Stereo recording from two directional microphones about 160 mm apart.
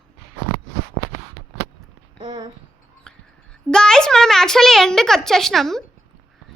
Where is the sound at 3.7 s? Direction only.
5° left (ahead or behind).